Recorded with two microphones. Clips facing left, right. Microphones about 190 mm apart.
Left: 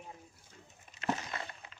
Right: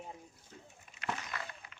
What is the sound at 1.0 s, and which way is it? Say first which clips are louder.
Breaking: left 4 dB; 30° left (ahead or behind).